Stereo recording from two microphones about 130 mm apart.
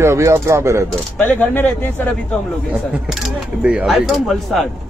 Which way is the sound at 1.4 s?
15° left (ahead or behind).